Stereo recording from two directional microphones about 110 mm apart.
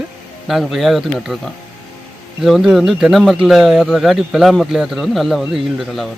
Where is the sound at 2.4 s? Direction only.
5° right (ahead or behind).